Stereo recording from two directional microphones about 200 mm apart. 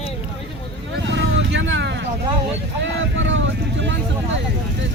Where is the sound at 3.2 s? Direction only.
65° right (ahead or behind).